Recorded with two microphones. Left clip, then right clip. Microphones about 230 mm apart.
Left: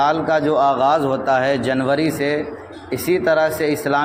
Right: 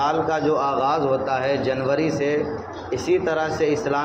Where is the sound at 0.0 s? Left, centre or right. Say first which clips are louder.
Left 4 dB; left.